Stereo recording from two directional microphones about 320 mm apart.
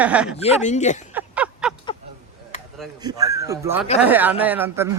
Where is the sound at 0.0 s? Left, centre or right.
Centre.